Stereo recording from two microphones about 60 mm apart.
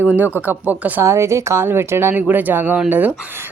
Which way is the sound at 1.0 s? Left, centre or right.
Right.